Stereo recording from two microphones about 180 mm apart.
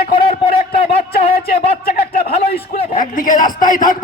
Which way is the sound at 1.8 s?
55° left (ahead or behind).